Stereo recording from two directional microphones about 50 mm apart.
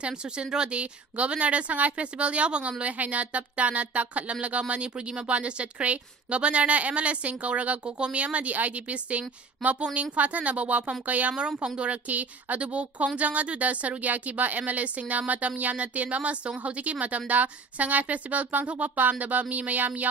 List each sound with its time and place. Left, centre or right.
0.0 s a woman's voice: centre
11.3 s a woman's voice: centre